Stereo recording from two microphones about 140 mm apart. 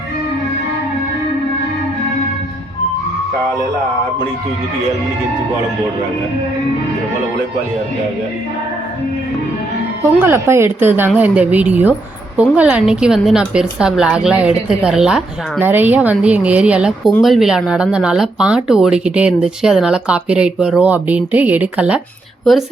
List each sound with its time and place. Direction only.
10.2 s a woman's voice: 15° right (ahead or behind)